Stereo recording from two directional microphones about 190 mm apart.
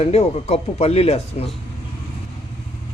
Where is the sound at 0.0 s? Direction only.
35° left (ahead or behind).